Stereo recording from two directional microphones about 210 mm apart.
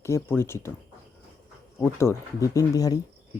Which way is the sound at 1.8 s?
10° left (ahead or behind).